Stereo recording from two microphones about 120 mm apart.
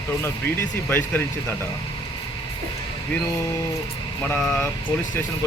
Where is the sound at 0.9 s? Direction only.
15° left (ahead or behind).